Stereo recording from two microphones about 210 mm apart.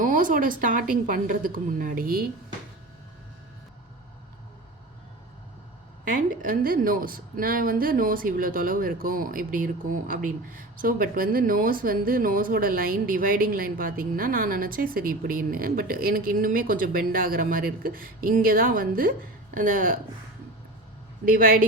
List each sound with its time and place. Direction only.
0.0 s a woman's voice: 40° right (ahead or behind)
6.1 s a woman's voice: 40° right (ahead or behind)
21.2 s a woman's voice: 45° right (ahead or behind)